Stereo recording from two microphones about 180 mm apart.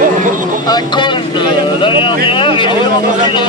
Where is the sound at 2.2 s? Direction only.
30° left (ahead or behind).